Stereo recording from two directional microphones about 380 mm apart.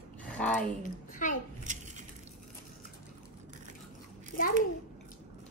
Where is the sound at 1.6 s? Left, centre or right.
Centre.